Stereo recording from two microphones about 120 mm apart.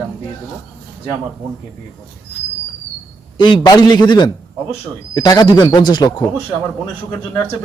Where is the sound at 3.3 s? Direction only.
40° left (ahead or behind).